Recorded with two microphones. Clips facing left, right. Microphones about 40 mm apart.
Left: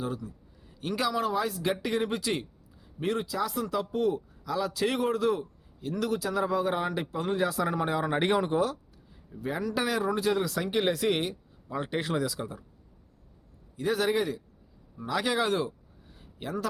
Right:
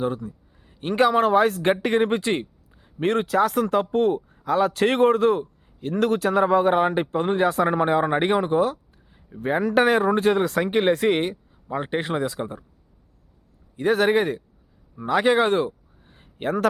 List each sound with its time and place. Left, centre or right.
0.0 s speech: right
3.0 s speech: right
9.4 s speech: right
13.7 s speech: right
14.9 s a sound: right